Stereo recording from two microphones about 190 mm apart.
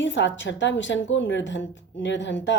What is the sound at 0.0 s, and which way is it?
A woman's voice, 75° left (ahead or behind).